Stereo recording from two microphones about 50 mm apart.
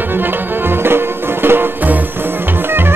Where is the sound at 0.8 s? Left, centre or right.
Right.